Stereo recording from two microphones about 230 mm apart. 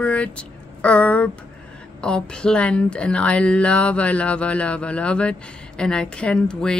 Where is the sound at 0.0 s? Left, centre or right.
Centre.